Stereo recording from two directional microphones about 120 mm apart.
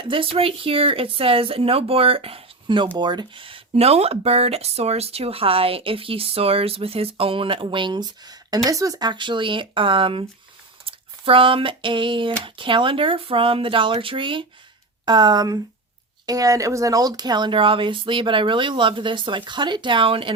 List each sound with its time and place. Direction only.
0.1 s speech: 50° right (ahead or behind)